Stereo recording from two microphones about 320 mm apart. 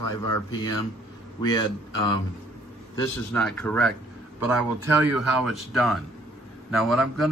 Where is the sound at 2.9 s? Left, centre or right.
Centre.